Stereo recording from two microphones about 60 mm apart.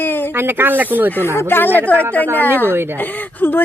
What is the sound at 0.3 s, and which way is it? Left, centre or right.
Speech, right.